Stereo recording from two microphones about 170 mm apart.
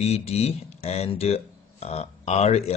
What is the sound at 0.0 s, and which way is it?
Speech, 40° left (ahead or behind).